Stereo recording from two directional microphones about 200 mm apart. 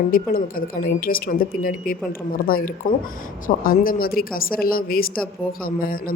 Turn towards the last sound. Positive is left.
turn(degrees=45)  # may be behind; listen again after turning